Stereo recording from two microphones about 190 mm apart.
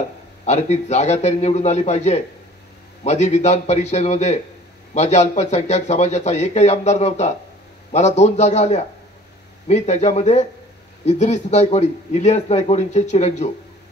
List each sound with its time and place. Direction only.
0.5 s speech: 35° left (ahead or behind)